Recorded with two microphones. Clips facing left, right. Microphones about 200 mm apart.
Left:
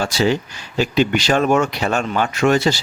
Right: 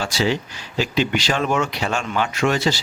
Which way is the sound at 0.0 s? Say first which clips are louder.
Left 4 dB; 50° left (ahead or behind).